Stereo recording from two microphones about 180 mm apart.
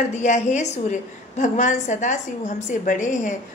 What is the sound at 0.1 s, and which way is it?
A woman's voice, 40° left (ahead or behind).